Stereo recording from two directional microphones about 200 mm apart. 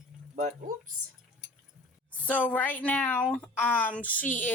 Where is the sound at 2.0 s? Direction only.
5° left (ahead or behind).